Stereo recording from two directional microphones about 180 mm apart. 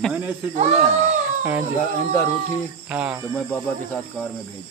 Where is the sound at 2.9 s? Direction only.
10° right (ahead or behind).